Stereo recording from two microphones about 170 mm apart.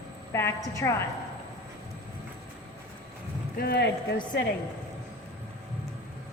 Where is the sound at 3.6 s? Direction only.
75° left (ahead or behind).